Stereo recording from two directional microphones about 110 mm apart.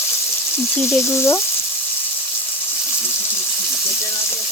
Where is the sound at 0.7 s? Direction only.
25° left (ahead or behind).